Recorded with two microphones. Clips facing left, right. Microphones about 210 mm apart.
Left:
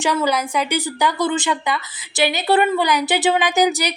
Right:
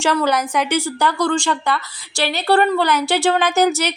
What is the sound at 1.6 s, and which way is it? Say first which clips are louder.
A woman's voice: right 2 dB; 20° left (ahead or behind).